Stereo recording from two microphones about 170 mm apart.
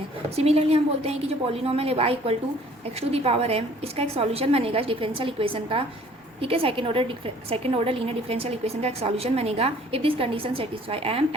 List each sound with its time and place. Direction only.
0.3 s a woman's voice: 35° right (ahead or behind)